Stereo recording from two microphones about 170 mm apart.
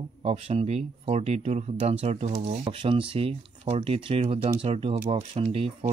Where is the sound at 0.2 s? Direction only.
35° right (ahead or behind).